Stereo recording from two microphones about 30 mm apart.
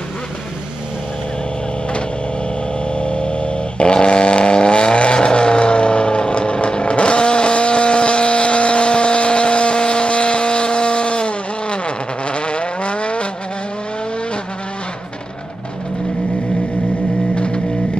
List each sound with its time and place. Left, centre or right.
2.9 s vehicle: left